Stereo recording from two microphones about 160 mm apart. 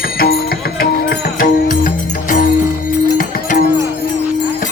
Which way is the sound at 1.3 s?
60° left (ahead or behind).